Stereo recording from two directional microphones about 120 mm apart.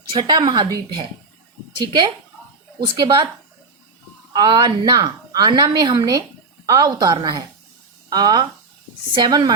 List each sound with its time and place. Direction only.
0.1 s a woman's voice: 40° right (ahead or behind)
2.8 s a woman's voice: 40° right (ahead or behind)
4.3 s a woman's voice: 35° right (ahead or behind)